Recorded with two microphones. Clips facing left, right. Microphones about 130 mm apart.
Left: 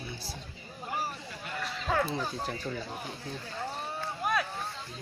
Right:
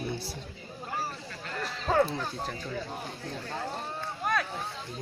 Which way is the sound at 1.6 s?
35° right (ahead or behind).